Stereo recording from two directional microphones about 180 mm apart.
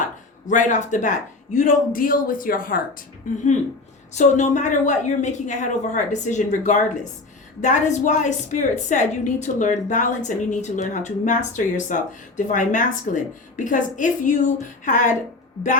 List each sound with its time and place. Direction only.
0.4 s a woman's voice: 45° left (ahead or behind)